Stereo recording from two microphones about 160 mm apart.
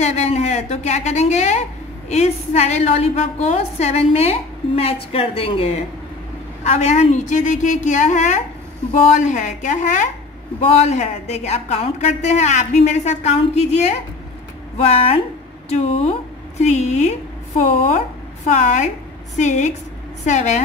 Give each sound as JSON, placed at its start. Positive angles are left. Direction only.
{"t": 0.0, "sound": "a woman's voice", "side_deg": 45}
{"t": 18.5, "sound": "a woman's voice", "side_deg": 50}